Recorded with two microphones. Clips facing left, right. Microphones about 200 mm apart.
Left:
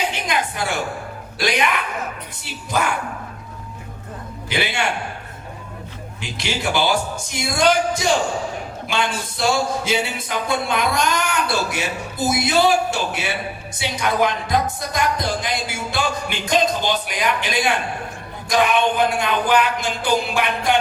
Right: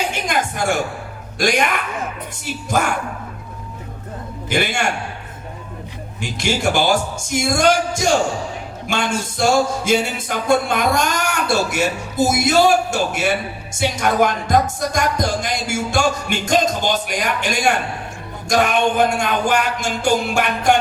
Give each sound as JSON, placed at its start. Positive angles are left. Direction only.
{"t": 0.1, "sound": "music", "side_deg": -50}
{"t": 4.4, "sound": "music", "side_deg": -50}
{"t": 6.3, "sound": "music", "side_deg": -50}